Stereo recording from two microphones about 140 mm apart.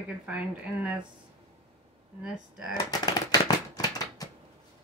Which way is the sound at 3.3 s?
25° left (ahead or behind).